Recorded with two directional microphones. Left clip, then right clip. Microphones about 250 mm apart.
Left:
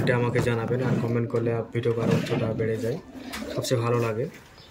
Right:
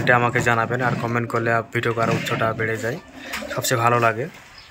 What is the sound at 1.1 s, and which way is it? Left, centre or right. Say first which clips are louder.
Speech: right 5 dB; right.